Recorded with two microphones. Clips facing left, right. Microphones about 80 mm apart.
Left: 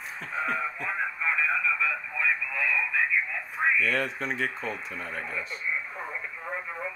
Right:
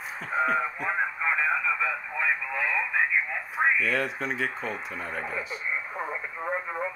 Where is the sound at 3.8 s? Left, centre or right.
Centre.